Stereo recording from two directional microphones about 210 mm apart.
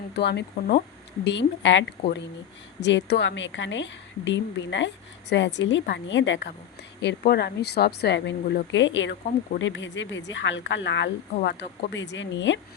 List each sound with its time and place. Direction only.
0.1 s a woman's voice: 55° left (ahead or behind)
11.3 s a woman's voice: 50° left (ahead or behind)